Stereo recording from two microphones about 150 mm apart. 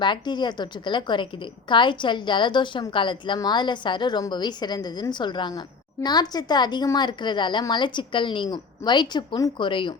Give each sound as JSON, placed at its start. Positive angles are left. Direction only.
{"t": 0.0, "sound": "a woman's voice", "side_deg": 30}